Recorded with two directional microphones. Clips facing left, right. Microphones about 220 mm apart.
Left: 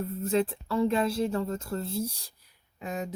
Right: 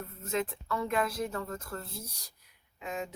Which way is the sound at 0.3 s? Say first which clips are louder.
Left 5 dB; 30° left (ahead or behind).